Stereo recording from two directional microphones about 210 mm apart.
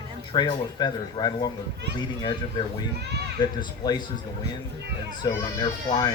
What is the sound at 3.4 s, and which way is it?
Speech, 20° left (ahead or behind).